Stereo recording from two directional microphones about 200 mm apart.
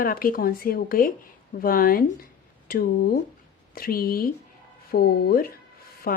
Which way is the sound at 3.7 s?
45° left (ahead or behind).